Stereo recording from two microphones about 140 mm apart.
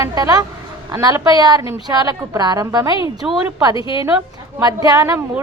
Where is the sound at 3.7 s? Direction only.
35° left (ahead or behind).